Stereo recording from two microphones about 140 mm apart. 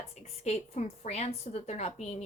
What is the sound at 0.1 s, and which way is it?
A woman's voice, 55° left (ahead or behind).